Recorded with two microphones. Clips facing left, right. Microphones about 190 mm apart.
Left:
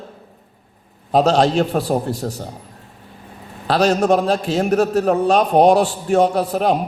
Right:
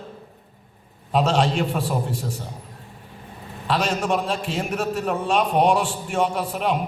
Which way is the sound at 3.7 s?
40° left (ahead or behind).